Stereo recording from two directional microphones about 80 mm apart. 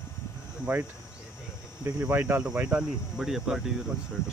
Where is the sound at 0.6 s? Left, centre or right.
Right.